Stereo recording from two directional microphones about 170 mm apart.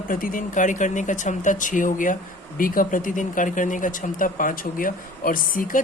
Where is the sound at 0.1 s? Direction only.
55° left (ahead or behind).